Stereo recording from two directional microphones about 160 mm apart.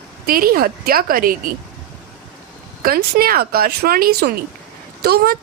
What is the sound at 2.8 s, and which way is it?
A woman's voice, 65° right (ahead or behind).